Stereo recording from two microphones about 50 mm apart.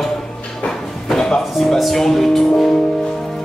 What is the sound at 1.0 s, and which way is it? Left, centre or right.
Music, centre.